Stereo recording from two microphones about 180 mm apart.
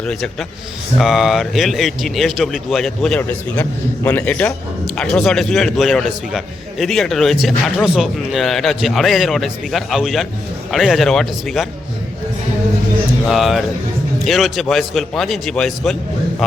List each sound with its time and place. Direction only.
0.0 s a man's voice: 5° left (ahead or behind)
13.2 s a man's voice: centre (ahead or behind)